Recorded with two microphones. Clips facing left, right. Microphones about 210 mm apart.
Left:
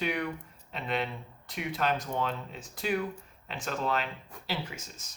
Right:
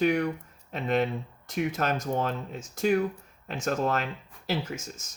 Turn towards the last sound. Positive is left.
turn(degrees=-45)  # may be behind; listen again after turning